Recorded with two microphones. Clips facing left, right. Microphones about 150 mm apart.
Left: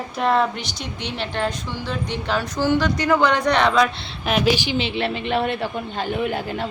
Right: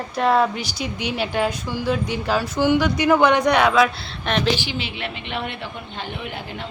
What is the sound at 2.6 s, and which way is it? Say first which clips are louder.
A woman's voice: right 2 dB; 15° right (ahead or behind).